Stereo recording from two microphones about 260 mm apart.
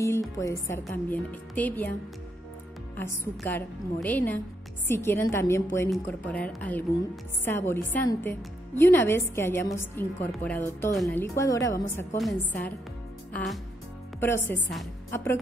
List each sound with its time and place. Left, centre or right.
0.0 s a woman's voice: centre
3.0 s a woman's voice: centre
14.2 s a woman's voice: centre